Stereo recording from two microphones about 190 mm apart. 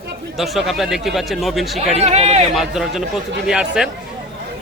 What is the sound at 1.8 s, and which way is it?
Speech, 35° right (ahead or behind).